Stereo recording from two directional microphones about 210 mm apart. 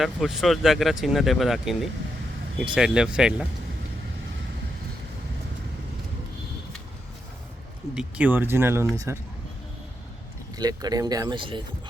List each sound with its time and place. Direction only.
0.0 s speech: centre (ahead or behind)
7.9 s speech: 5° right (ahead or behind)
10.6 s speech: 20° right (ahead or behind)